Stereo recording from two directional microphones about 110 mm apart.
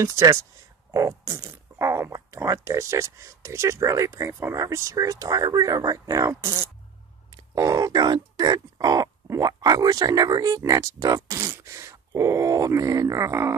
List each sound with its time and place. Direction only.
0.0 s speech: 30° right (ahead or behind)